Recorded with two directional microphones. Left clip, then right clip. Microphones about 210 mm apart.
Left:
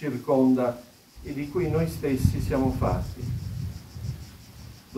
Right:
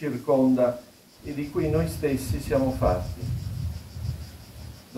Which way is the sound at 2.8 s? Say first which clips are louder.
Right 4 dB; 5° left (ahead or behind).